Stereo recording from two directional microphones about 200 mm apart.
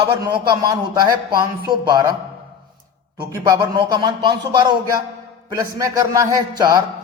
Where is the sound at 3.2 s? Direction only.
20° right (ahead or behind).